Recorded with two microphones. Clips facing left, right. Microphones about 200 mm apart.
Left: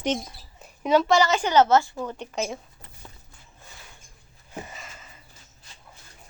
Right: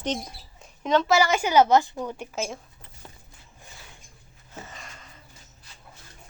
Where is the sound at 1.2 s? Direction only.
10° right (ahead or behind).